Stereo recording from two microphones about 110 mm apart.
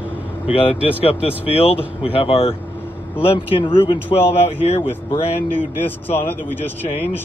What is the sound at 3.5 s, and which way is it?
Speech, 50° left (ahead or behind).